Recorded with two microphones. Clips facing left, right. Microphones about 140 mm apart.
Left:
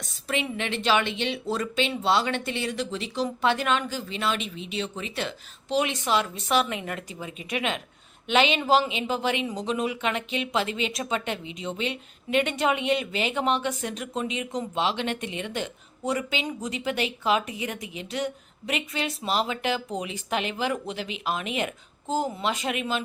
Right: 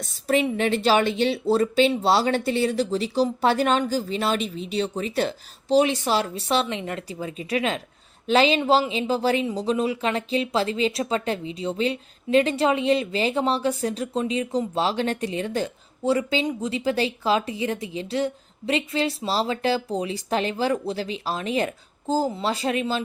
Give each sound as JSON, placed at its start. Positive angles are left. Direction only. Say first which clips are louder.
{"t": 0.0, "sound": "speech", "louder": "right 8 dB", "side_deg": -40}